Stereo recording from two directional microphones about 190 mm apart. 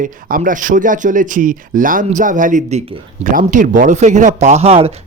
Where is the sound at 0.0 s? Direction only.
45° right (ahead or behind).